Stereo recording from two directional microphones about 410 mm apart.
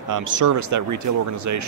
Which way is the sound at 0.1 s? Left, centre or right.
Right.